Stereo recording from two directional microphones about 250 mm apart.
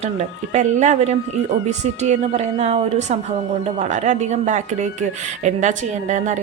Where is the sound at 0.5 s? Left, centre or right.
Right.